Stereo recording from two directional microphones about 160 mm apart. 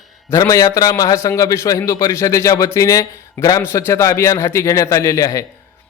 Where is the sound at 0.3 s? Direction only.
20° left (ahead or behind).